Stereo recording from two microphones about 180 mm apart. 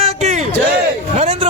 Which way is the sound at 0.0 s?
35° right (ahead or behind).